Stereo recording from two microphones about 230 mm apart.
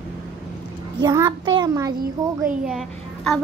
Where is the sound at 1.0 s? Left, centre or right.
Centre.